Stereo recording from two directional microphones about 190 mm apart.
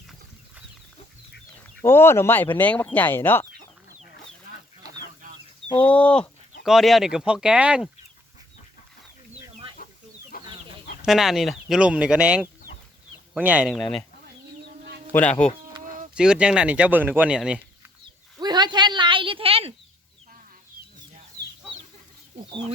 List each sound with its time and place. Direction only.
1.8 s speech: 10° left (ahead or behind)
5.7 s speech: 5° left (ahead or behind)
9.3 s chicken: 30° right (ahead or behind)
10.3 s chicken: 50° left (ahead or behind)
11.0 s speech: centre (ahead or behind)
15.1 s speech: 5° left (ahead or behind)
18.3 s a sound: 20° right (ahead or behind)